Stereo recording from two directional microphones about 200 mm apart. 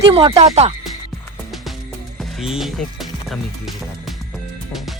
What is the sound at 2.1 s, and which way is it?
Music, centre (ahead or behind).